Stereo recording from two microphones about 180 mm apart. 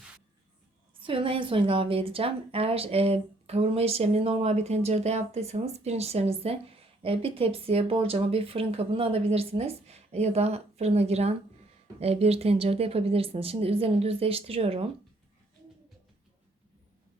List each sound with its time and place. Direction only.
0.9 s a woman's voice: 30° right (ahead or behind)